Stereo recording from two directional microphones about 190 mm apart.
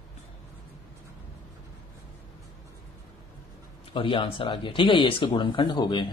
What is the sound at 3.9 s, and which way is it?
Speech, 30° left (ahead or behind).